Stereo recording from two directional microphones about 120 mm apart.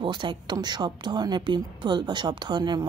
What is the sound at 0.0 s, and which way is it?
Speech, 40° right (ahead or behind).